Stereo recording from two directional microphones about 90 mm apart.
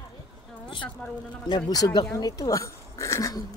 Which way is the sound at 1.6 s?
40° left (ahead or behind).